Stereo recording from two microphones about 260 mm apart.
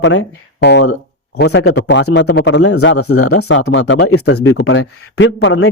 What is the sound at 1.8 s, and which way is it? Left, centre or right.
Speech, left.